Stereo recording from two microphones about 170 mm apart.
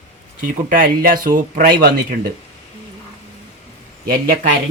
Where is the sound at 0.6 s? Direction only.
55° right (ahead or behind).